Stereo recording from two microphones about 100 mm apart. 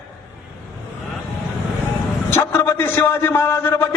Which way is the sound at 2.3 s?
25° left (ahead or behind).